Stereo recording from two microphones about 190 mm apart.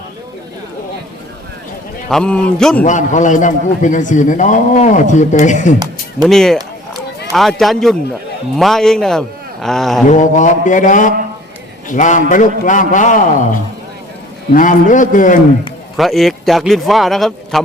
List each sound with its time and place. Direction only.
2.0 s speech: 5° left (ahead or behind)
2.8 s a man's voice: 40° left (ahead or behind)
6.2 s speech: centre (ahead or behind)
10.1 s a man's voice: 40° left (ahead or behind)
16.0 s speech: centre (ahead or behind)